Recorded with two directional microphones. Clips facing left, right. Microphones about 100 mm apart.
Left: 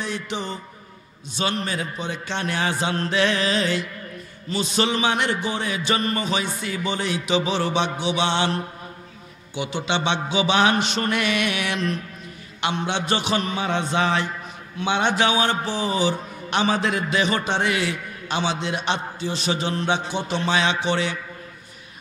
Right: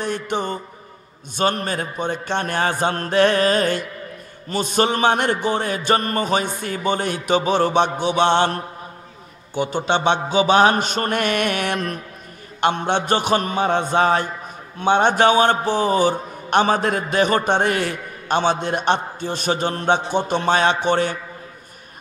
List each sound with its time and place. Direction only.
0.0 s music: 50° right (ahead or behind)
1.3 s a man's voice: 50° right (ahead or behind)